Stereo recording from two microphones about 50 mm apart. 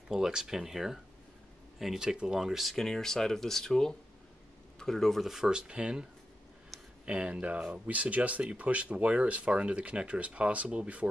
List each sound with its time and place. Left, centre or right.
0.1 s speech: centre
5.2 s speech: centre
7.1 s speech: right